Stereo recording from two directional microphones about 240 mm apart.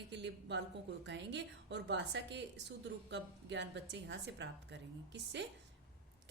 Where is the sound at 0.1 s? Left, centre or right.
Right.